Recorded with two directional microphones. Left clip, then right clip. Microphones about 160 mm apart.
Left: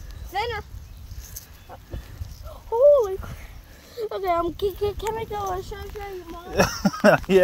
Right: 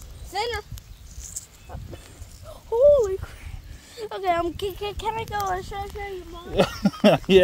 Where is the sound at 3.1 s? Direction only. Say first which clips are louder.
Right 1 dB; 30° right (ahead or behind).